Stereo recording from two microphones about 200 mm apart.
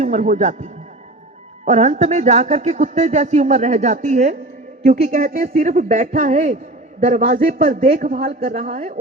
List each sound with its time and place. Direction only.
0.0 s speech: 35° right (ahead or behind)
8.4 s speech: 35° right (ahead or behind)